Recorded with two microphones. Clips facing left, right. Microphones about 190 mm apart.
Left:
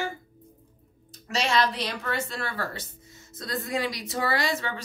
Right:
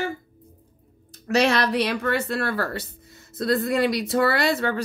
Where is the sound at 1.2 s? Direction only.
60° right (ahead or behind).